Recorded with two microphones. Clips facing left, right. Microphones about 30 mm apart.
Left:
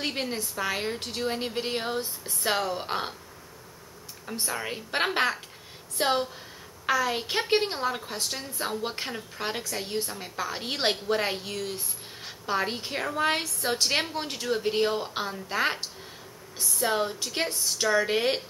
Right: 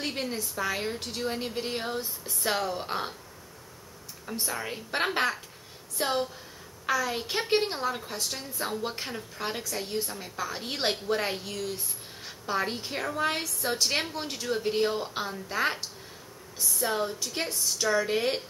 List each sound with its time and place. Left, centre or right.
0.0 s a woman's voice: centre
4.3 s a woman's voice: centre